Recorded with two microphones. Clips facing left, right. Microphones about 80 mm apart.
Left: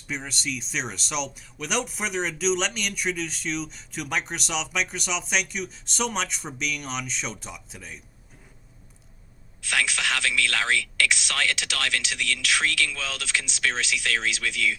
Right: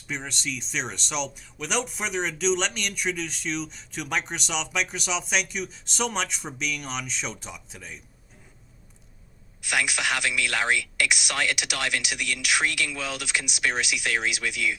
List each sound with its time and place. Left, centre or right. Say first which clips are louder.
0.1 s speech: left 1 dB; centre
9.6 s speech: even; centre